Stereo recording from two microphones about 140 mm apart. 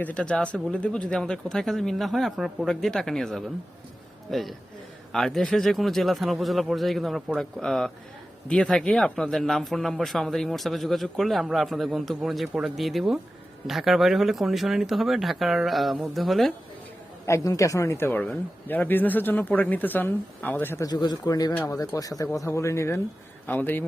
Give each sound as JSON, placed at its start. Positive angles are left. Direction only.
{"t": 0.0, "sound": "speech", "side_deg": 10}
{"t": 17.2, "sound": "speech", "side_deg": 20}
{"t": 20.8, "sound": "speech", "side_deg": 30}